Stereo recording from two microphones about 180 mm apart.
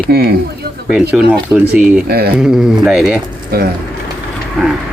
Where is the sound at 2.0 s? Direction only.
60° right (ahead or behind).